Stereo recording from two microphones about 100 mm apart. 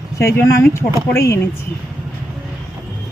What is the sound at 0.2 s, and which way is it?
Speech, 30° left (ahead or behind).